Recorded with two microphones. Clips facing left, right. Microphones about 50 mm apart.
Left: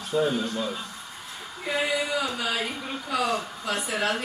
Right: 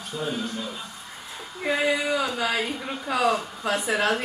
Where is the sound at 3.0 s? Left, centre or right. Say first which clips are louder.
Right 4 dB; right.